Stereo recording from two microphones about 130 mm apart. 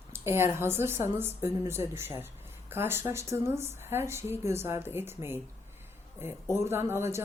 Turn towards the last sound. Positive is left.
turn(degrees=-20)  # may be behind; listen again after turning